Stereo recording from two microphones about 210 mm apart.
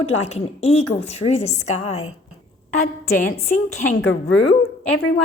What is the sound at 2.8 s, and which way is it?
A woman's voice, 45° left (ahead or behind).